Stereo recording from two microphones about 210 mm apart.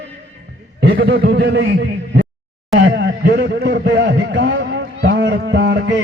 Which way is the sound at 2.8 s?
55° right (ahead or behind).